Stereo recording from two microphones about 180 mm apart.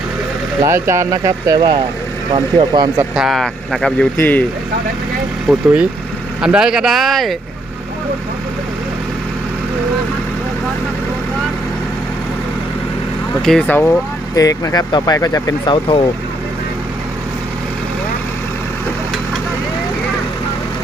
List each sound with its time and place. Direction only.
0.6 s speech: 15° right (ahead or behind)
3.2 s speech: centre (ahead or behind)
5.5 s speech: 5° right (ahead or behind)
13.4 s speech: 5° left (ahead or behind); by 16.0 s 30° left (ahead or behind)